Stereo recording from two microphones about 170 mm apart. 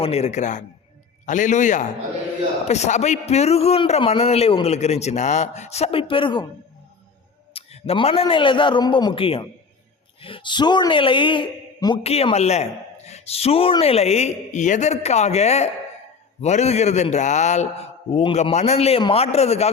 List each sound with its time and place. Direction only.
0.0 s a man's voice: 40° left (ahead or behind)
7.5 s a man's voice: 35° left (ahead or behind)